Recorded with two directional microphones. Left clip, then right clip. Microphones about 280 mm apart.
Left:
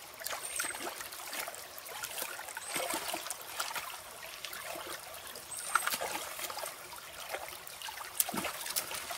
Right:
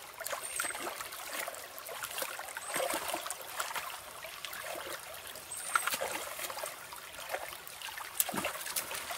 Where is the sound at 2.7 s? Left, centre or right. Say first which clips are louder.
Right 2 dB; centre.